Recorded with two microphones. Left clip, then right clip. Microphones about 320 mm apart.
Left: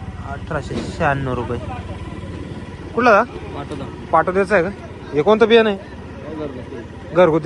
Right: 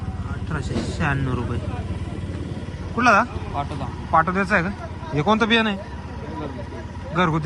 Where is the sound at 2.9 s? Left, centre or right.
Centre.